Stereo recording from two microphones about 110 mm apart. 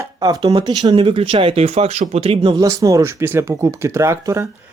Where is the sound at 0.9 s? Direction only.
50° right (ahead or behind).